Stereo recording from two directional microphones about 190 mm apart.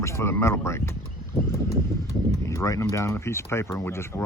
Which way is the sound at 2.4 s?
15° left (ahead or behind).